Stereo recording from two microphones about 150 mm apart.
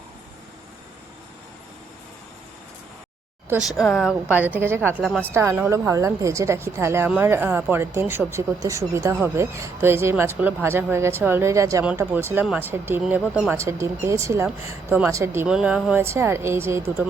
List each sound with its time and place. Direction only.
3.7 s speech: centre (ahead or behind)
4.3 s speech: 10° right (ahead or behind)
15.4 s speech: 5° right (ahead or behind)